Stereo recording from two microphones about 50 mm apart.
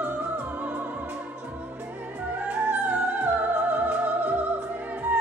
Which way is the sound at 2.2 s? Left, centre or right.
Right.